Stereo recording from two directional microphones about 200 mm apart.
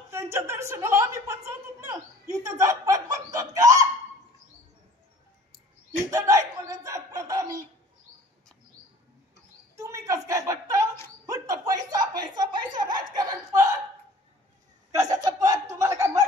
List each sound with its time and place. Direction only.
0.1 s a woman's voice: 15° right (ahead or behind)
5.9 s speech: 15° right (ahead or behind)
9.8 s a woman's voice: 15° right (ahead or behind)
14.9 s speech: 15° right (ahead or behind)